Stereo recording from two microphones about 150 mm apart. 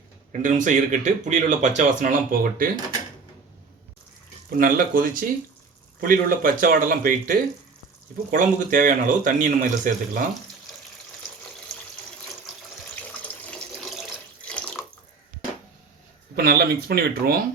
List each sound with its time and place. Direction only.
0.3 s speech: 60° right (ahead or behind)
4.4 s speech: 70° right (ahead or behind)
13.0 s water tap: 10° left (ahead or behind)
13.9 s water: 5° left (ahead or behind)
16.3 s speech: 90° right